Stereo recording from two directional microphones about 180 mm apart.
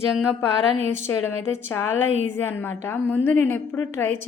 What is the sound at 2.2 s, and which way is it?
A woman's voice, 15° left (ahead or behind).